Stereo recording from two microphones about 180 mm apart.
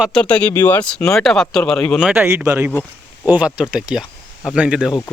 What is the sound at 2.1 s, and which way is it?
A man's voice, 10° right (ahead or behind).